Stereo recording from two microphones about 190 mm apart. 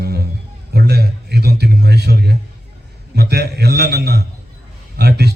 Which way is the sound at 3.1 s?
55° right (ahead or behind).